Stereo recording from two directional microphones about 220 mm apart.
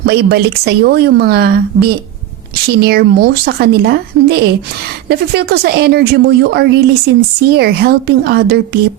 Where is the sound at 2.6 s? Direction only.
45° right (ahead or behind).